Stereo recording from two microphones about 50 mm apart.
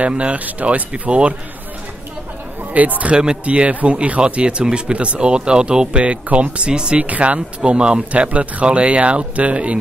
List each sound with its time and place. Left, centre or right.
0.1 s speech: right
2.7 s speech: right